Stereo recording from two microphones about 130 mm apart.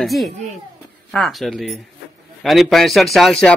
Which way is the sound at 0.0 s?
Centre (ahead or behind).